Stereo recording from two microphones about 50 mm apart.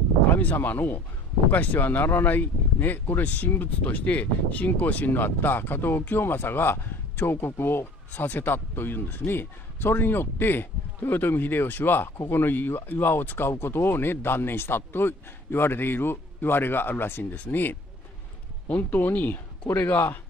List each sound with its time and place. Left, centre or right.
0.3 s speech: left
8.1 s speech: left